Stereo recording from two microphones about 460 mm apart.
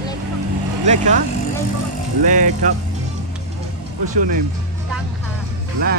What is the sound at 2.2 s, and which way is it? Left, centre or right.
Music, centre.